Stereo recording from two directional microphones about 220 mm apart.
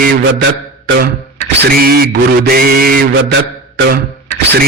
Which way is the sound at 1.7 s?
40° right (ahead or behind).